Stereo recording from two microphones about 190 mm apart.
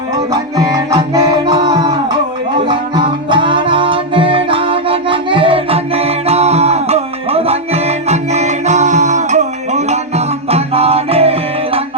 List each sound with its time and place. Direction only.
0.3 s music: 20° right (ahead or behind)